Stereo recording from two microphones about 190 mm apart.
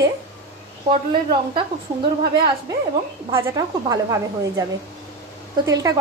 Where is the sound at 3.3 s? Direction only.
15° right (ahead or behind).